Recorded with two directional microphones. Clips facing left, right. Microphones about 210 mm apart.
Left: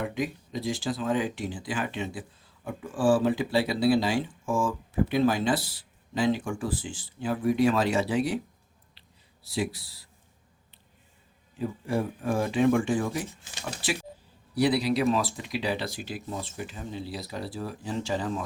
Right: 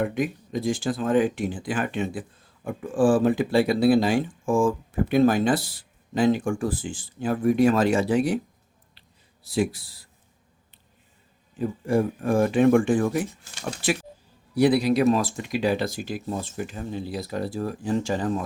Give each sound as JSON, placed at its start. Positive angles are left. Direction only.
{"t": 0.0, "sound": "speech", "side_deg": -50}
{"t": 9.0, "sound": "a sound", "side_deg": -50}
{"t": 11.9, "sound": "speech", "side_deg": -50}
{"t": 14.5, "sound": "speech", "side_deg": -50}